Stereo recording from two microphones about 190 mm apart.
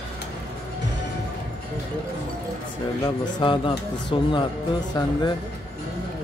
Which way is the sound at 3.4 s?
25° left (ahead or behind).